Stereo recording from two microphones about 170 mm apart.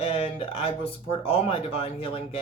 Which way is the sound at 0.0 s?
35° left (ahead or behind).